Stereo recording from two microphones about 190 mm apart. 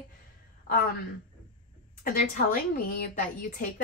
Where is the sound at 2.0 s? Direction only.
50° left (ahead or behind).